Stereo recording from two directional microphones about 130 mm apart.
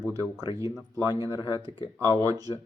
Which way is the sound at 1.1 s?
25° right (ahead or behind).